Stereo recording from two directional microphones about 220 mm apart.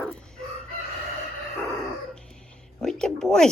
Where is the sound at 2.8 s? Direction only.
Centre (ahead or behind).